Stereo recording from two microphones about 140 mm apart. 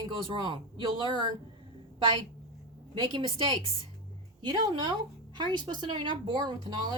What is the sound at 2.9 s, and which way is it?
Speech, 30° right (ahead or behind).